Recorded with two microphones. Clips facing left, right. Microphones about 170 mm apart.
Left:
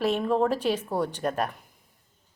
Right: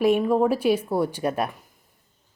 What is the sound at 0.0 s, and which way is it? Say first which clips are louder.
A woman's voice: right 5 dB; 10° right (ahead or behind).